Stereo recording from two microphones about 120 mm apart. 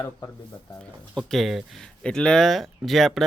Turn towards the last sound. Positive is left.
turn(degrees=0)  # may be behind; listen again after turning